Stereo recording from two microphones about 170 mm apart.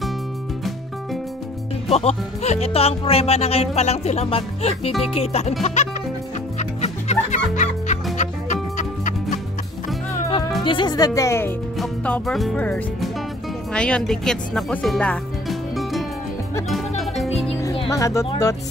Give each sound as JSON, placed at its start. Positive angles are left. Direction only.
{"t": 1.9, "sound": "speech", "side_deg": 35}
{"t": 6.6, "sound": "music", "side_deg": 40}
{"t": 10.6, "sound": "speech", "side_deg": 30}
{"t": 11.8, "sound": "speech", "side_deg": 5}
{"t": 17.8, "sound": "speech", "side_deg": 20}